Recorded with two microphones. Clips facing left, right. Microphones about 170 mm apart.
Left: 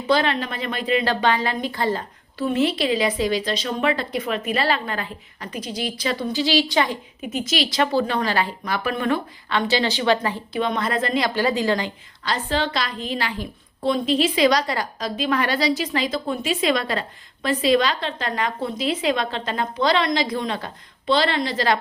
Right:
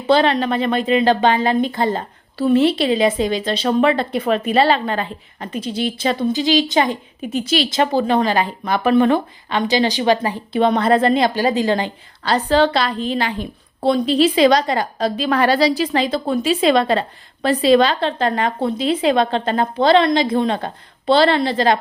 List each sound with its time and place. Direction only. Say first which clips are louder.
0.1 s a woman's voice: right 6 dB; 30° right (ahead or behind)
7.2 s a woman's voice: right 4 dB; 30° right (ahead or behind); by 10.4 s 15° right (ahead or behind)
10.5 s a woman's voice: right 10 dB; 30° right (ahead or behind)
12.2 s a woman's voice: right 8 dB; 35° right (ahead or behind)